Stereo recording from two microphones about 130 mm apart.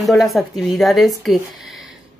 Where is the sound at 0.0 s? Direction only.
Centre (ahead or behind).